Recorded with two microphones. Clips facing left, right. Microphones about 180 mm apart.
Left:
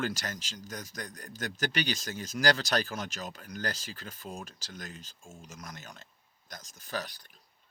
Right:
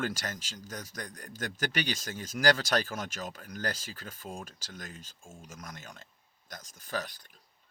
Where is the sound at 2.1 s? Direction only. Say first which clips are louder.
Right 2 dB; 45° left (ahead or behind).